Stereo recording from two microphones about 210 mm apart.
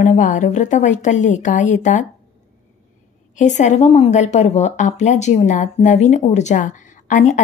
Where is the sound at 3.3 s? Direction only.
35° left (ahead or behind).